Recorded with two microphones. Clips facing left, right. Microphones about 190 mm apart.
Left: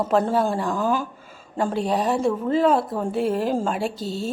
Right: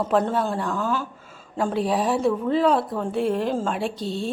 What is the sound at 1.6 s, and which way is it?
Speech, centre (ahead or behind).